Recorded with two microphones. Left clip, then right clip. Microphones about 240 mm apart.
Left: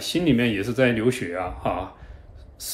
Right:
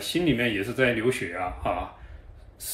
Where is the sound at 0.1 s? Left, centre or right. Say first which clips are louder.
Left 3 dB; centre.